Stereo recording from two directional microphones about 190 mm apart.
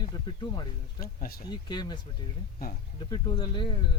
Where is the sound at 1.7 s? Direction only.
25° left (ahead or behind).